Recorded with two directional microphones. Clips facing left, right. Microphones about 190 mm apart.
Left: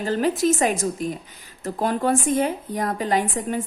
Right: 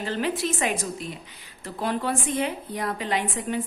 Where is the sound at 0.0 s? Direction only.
40° left (ahead or behind).